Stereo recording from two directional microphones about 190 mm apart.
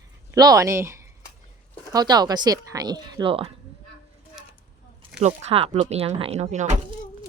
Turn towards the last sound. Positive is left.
turn(degrees=-35)  # may be behind; listen again after turning